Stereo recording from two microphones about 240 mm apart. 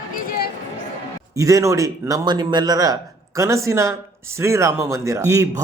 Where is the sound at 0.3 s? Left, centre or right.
Left.